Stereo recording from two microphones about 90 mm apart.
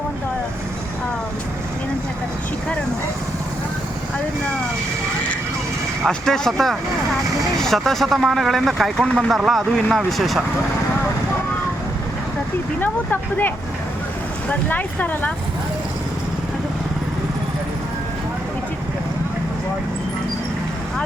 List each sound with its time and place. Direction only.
6.1 s speech: 5° left (ahead or behind)
12.8 s speech: 20° left (ahead or behind)
14.7 s speech: 15° left (ahead or behind)